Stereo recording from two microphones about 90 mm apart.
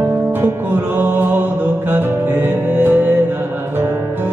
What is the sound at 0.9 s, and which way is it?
Music, 25° right (ahead or behind).